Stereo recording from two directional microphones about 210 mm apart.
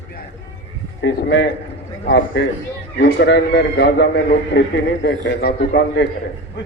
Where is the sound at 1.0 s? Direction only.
60° left (ahead or behind).